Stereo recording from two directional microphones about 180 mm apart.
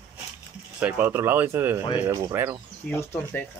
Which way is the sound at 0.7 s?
10° right (ahead or behind).